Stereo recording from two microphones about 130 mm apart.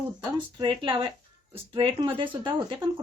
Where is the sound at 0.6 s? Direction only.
35° right (ahead or behind).